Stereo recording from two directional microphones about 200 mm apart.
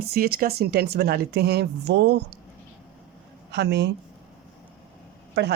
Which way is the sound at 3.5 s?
55° right (ahead or behind).